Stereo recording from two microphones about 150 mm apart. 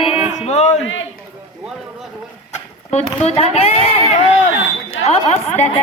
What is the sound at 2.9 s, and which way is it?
A woman's voice, 45° left (ahead or behind).